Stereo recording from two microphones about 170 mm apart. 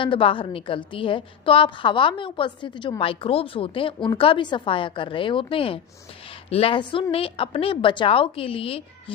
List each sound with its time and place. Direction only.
0.0 s a woman's voice: 30° left (ahead or behind)